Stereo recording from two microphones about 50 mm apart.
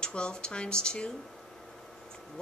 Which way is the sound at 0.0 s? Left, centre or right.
Centre.